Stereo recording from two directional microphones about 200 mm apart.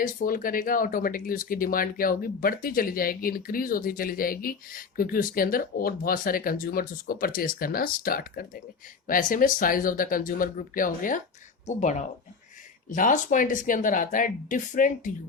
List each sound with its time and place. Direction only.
0.0 s speech: 40° left (ahead or behind)